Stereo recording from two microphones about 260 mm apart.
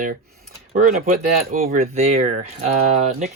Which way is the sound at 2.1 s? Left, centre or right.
Right.